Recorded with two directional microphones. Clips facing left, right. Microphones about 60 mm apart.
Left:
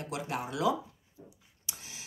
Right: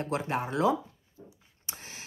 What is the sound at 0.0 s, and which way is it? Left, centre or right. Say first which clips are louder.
Speech: right 5 dB; right.